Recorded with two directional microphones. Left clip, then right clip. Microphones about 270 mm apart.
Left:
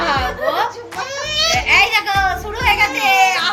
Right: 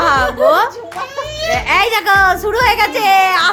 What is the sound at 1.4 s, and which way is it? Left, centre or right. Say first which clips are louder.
Speech: even; centre.